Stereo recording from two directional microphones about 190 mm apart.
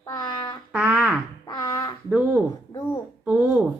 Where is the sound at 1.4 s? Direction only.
25° left (ahead or behind).